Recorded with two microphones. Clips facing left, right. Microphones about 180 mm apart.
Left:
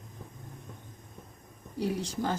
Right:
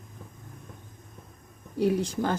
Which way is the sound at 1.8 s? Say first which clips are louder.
Right 6 dB; 55° right (ahead or behind).